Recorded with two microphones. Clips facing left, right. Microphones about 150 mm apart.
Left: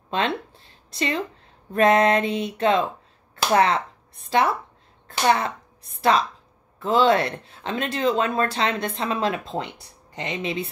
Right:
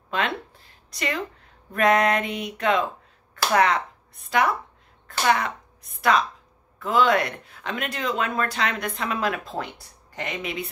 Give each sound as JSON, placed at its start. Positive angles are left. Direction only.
{"t": 0.1, "sound": "speech", "side_deg": 30}